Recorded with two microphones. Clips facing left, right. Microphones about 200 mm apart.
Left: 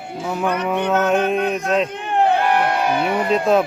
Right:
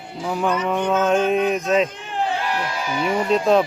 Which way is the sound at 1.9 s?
60° left (ahead or behind).